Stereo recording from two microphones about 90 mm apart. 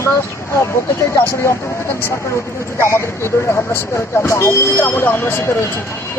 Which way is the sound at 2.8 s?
30° left (ahead or behind).